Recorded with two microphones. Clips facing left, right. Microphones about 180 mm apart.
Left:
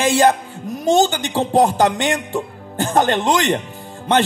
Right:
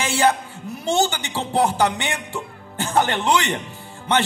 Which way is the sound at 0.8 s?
15° left (ahead or behind).